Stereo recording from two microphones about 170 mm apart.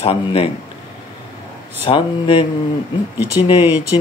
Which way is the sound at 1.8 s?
30° left (ahead or behind).